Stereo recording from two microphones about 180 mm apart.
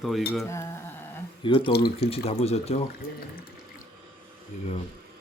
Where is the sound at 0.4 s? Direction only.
15° left (ahead or behind).